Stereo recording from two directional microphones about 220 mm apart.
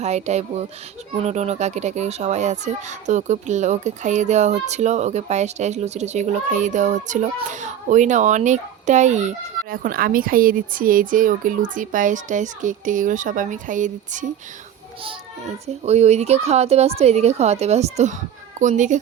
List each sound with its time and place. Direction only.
0.0 s a woman's voice: 30° right (ahead or behind)
15.6 s a woman's voice: 30° right (ahead or behind)